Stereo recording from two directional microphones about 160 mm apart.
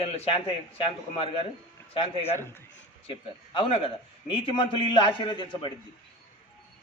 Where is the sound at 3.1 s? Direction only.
35° left (ahead or behind).